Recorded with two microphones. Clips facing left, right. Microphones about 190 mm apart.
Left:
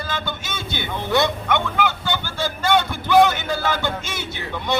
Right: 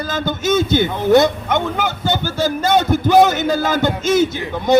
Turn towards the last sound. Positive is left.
turn(degrees=-45)  # may be behind; listen again after turning